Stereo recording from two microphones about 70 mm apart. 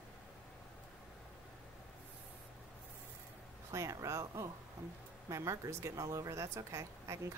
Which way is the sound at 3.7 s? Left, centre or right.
Right.